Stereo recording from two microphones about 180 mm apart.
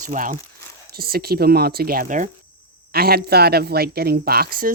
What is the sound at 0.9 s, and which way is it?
Speech, 60° right (ahead or behind).